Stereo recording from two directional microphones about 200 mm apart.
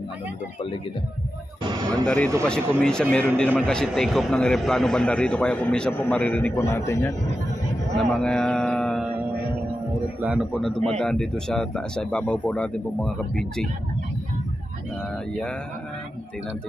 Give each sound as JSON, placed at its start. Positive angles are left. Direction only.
{"t": 1.6, "sound": "a sound", "side_deg": -20}
{"t": 2.0, "sound": "a man's voice", "side_deg": 5}
{"t": 7.9, "sound": "mantra", "side_deg": 5}
{"t": 10.2, "sound": "a man's voice", "side_deg": 0}